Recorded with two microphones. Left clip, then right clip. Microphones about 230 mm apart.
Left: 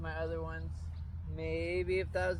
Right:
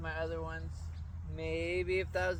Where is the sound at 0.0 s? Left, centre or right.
Centre.